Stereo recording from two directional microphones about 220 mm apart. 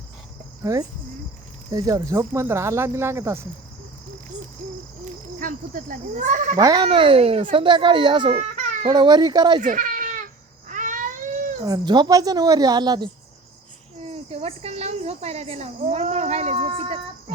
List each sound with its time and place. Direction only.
0.6 s speech: 15° right (ahead or behind)
5.0 s speech: 40° right (ahead or behind)
6.6 s speech: 20° right (ahead or behind)
8.4 s babbling: 30° right (ahead or behind)
8.9 s speech: 20° right (ahead or behind)
9.6 s cat: 35° right (ahead or behind)
10.7 s a sound: 35° right (ahead or behind)
11.6 s speech: 15° right (ahead or behind)
14.1 s speech: 25° right (ahead or behind)